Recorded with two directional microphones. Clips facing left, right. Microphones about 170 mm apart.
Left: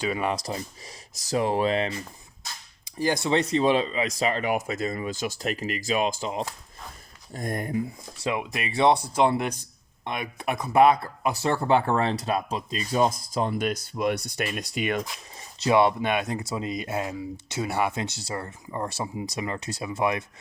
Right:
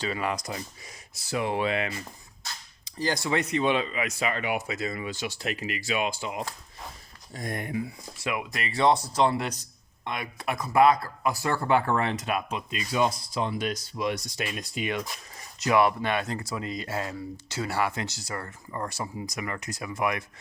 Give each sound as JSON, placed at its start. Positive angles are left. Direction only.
{"t": 0.0, "sound": "speech", "side_deg": 20}
{"t": 3.0, "sound": "speech", "side_deg": 20}
{"t": 7.3, "sound": "speech", "side_deg": 45}
{"t": 8.2, "sound": "speech", "side_deg": 25}
{"t": 15.6, "sound": "speech", "side_deg": 25}